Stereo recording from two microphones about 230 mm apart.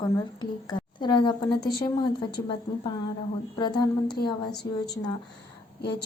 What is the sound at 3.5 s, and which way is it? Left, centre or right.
A woman's voice, centre.